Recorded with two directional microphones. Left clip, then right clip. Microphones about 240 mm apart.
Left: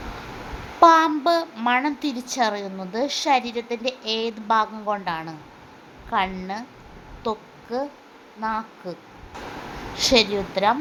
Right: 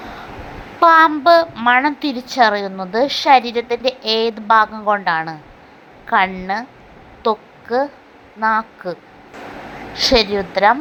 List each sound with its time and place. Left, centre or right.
0.8 s a woman's voice: centre
7.2 s a sound: centre
8.4 s a woman's voice: centre